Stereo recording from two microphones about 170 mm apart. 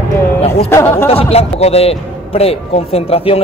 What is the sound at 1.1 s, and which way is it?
A man's voice, 35° left (ahead or behind).